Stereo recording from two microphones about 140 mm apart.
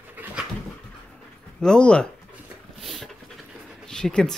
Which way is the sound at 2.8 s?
Centre (ahead or behind).